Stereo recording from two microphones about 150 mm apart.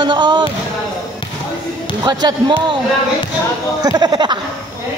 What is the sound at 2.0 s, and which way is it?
Speech, 30° right (ahead or behind).